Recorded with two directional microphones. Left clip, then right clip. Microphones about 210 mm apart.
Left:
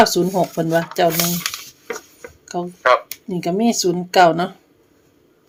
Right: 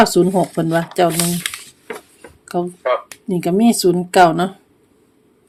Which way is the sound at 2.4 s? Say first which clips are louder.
Right 4 dB; 15° right (ahead or behind).